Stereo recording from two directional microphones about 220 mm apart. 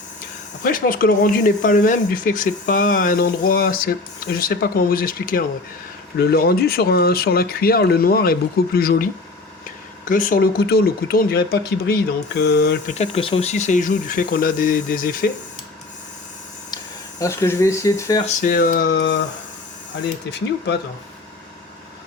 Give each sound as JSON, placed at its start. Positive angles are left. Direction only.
{"t": 0.6, "sound": "speech", "side_deg": 40}
{"t": 10.1, "sound": "speech", "side_deg": 40}
{"t": 12.9, "sound": "speech", "side_deg": 30}
{"t": 16.7, "sound": "speech", "side_deg": 15}
{"t": 18.3, "sound": "speech", "side_deg": 35}